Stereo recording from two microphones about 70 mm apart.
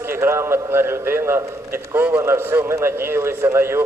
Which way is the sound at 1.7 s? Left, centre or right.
Right.